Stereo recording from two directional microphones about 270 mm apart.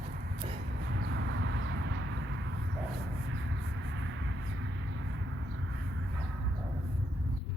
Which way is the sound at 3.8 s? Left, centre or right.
Right.